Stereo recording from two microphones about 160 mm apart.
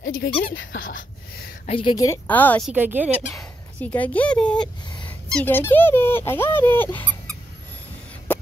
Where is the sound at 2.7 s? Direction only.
10° right (ahead or behind).